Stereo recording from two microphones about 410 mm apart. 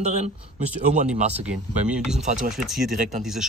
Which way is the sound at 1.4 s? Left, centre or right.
Centre.